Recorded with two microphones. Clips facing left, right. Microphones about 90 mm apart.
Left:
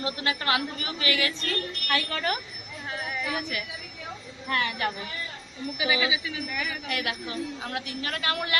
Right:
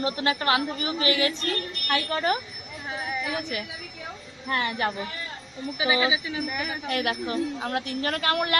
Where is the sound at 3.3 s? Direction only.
35° right (ahead or behind).